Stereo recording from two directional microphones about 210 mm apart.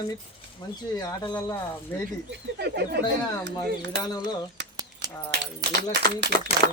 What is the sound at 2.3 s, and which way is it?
Speech, 50° right (ahead or behind).